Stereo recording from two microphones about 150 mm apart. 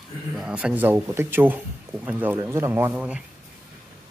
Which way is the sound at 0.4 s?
5° right (ahead or behind).